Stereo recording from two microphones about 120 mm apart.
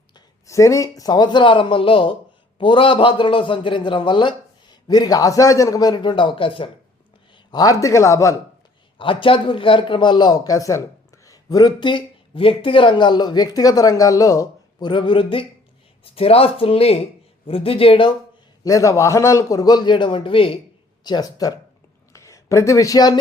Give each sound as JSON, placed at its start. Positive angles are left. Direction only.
{"t": 0.4, "sound": "a man's voice", "side_deg": 25}
{"t": 7.5, "sound": "speech", "side_deg": 30}
{"t": 9.0, "sound": "a man's voice", "side_deg": 45}
{"t": 18.6, "sound": "a man's voice", "side_deg": 25}
{"t": 21.0, "sound": "a man's voice", "side_deg": 35}
{"t": 22.1, "sound": "a sound", "side_deg": 25}